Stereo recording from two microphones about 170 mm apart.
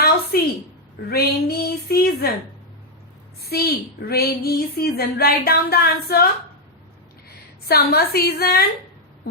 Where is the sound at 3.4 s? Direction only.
65° left (ahead or behind).